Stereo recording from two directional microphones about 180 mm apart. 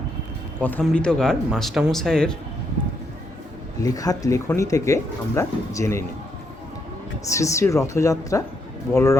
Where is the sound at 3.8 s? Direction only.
20° left (ahead or behind).